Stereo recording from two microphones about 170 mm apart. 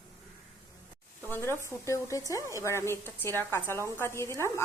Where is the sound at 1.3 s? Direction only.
15° left (ahead or behind).